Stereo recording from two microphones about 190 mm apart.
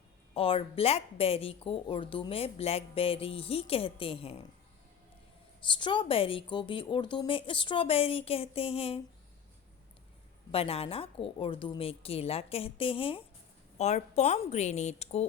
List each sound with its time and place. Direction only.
0.3 s speech: 30° left (ahead or behind)
5.6 s speech: 25° left (ahead or behind)
10.5 s a woman's voice: 30° left (ahead or behind)